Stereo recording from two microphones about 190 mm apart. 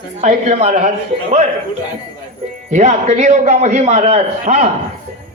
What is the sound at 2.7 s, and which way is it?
A man's voice, 35° right (ahead or behind).